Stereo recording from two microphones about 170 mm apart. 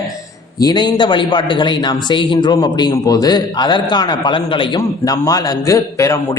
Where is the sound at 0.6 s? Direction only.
25° left (ahead or behind).